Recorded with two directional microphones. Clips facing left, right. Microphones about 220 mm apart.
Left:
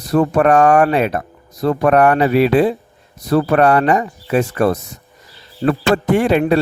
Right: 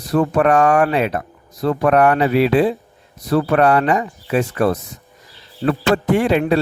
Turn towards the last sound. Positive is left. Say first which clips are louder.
# left 2 dB
turn(degrees=50)  # may be behind; listen again after turning